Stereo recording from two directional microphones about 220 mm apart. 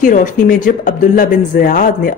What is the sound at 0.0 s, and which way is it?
Speech, 35° left (ahead or behind).